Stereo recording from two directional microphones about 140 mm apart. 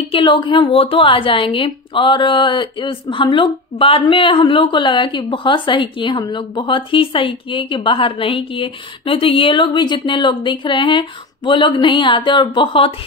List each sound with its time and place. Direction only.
0.1 s a woman's voice: 35° left (ahead or behind)